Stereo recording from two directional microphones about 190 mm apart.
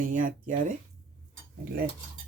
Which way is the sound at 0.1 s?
45° right (ahead or behind).